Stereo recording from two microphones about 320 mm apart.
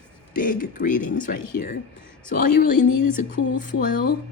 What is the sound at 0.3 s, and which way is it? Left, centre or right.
Speech, left.